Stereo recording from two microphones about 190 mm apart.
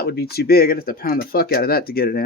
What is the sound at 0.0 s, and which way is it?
Speech, 55° left (ahead or behind).